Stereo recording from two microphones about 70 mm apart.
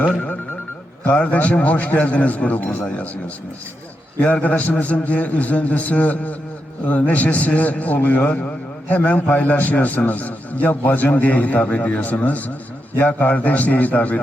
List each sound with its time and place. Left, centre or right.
1.0 s a man's voice: left
4.2 s a man's voice: left